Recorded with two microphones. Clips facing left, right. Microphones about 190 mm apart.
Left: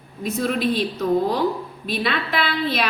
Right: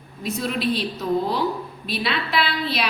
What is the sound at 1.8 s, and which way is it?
A woman's voice, 45° left (ahead or behind).